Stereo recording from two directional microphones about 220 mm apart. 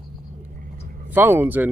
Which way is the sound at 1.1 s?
10° right (ahead or behind).